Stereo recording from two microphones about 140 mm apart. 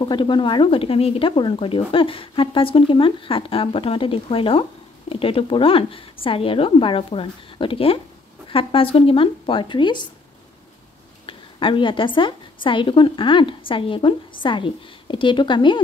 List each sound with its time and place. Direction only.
0.0 s speech: 35° left (ahead or behind)
11.2 s speech: 40° left (ahead or behind)